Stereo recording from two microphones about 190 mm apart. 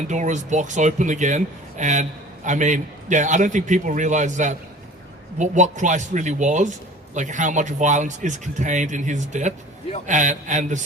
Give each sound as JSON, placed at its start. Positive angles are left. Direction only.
{"t": 0.1, "sound": "speech", "side_deg": -40}